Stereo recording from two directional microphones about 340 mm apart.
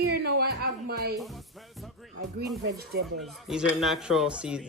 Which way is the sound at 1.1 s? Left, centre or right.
Centre.